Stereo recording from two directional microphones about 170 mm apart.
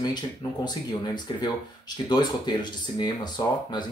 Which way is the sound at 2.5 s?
25° left (ahead or behind).